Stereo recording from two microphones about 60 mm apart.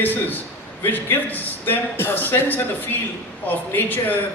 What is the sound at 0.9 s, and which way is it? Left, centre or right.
A man's voice, left.